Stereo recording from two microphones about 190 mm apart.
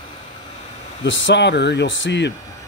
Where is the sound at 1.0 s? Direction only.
70° left (ahead or behind).